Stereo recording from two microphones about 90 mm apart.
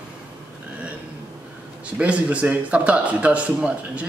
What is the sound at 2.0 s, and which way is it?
A man's voice, 15° right (ahead or behind).